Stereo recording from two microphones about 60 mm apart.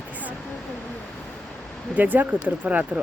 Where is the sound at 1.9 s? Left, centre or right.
Right.